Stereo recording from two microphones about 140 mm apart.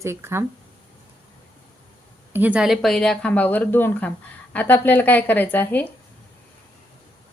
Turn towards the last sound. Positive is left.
turn(degrees=15)  # may be behind; listen again after turning